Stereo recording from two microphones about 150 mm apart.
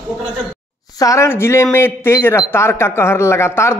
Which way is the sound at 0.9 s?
20° left (ahead or behind).